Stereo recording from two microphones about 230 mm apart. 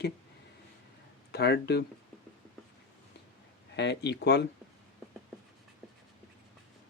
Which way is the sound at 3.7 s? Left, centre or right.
Left.